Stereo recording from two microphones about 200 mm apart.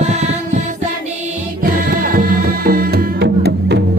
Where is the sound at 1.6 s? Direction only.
50° right (ahead or behind).